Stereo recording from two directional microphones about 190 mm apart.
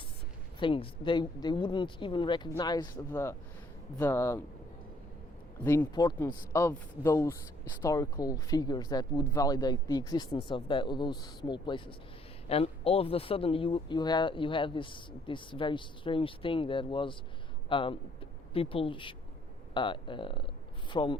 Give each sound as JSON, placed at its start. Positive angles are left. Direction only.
{"t": 0.6, "sound": "speech", "side_deg": 25}
{"t": 5.6, "sound": "speech", "side_deg": 15}